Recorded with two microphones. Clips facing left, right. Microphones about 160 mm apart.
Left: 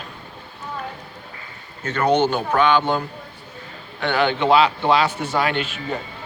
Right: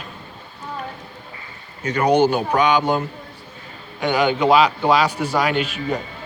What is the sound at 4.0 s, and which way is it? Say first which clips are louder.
Speech: right 2 dB; 10° right (ahead or behind).